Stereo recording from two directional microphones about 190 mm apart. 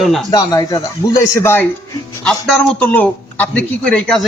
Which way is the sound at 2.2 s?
5° left (ahead or behind).